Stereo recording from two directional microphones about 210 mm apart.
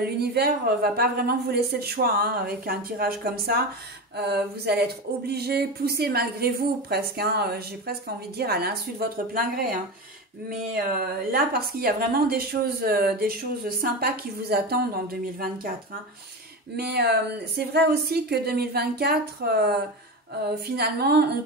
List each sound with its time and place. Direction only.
0.0 s a woman's voice: 50° right (ahead or behind)
16.7 s a woman's voice: 50° right (ahead or behind)